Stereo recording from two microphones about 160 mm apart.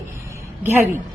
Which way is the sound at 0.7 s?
15° right (ahead or behind).